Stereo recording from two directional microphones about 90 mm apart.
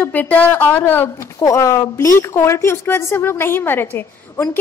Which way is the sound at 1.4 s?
40° left (ahead or behind).